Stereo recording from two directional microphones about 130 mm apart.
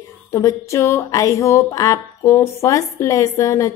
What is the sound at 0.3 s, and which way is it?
Speech, 20° left (ahead or behind).